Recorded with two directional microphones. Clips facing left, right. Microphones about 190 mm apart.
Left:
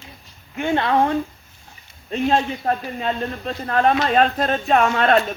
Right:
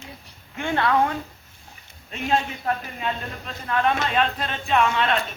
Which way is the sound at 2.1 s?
35° left (ahead or behind).